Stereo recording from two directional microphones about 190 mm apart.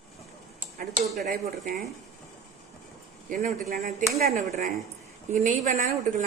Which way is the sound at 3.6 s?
35° right (ahead or behind).